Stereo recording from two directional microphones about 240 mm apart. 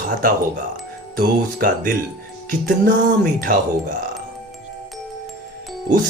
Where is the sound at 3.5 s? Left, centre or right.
Right.